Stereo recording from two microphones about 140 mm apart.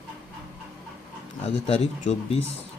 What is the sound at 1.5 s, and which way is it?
Speech, 45° left (ahead or behind).